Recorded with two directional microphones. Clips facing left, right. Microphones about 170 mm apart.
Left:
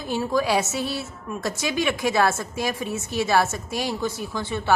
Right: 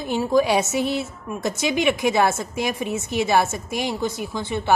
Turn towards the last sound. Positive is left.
turn(degrees=-15)  # may be behind; listen again after turning